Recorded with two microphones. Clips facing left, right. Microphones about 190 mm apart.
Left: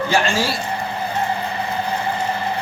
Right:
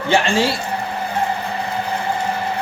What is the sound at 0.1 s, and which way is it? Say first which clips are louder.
Speech: right 5 dB; 25° right (ahead or behind).